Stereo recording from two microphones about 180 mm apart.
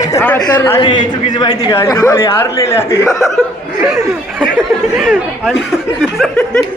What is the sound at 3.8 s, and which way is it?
Speech, centre (ahead or behind).